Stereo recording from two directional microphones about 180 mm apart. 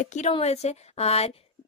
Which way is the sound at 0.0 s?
40° left (ahead or behind).